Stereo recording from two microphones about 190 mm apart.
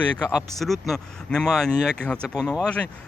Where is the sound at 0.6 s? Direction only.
Centre (ahead or behind).